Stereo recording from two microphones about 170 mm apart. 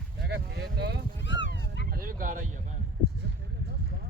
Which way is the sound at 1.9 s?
55° right (ahead or behind).